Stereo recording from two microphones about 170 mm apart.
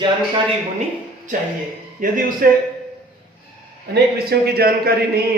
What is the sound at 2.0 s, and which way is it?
Speech, 55° right (ahead or behind).